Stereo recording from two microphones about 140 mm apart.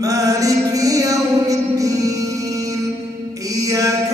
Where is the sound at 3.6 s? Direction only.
25° right (ahead or behind).